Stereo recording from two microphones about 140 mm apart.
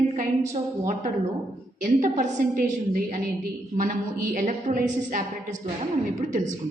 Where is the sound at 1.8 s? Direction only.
60° right (ahead or behind).